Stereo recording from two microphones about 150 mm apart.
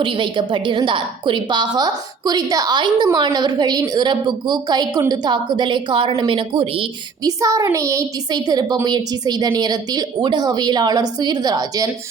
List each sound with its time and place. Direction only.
0.0 s a woman's voice: 35° right (ahead or behind)
7.3 s a woman's voice: 20° right (ahead or behind)